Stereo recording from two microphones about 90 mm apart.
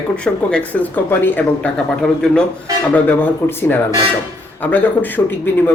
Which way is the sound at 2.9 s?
20° left (ahead or behind).